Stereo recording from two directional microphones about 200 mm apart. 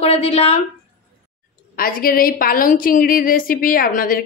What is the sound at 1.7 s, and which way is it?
A woman's voice, 45° left (ahead or behind).